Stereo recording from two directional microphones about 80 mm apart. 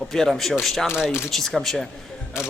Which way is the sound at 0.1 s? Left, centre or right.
Centre.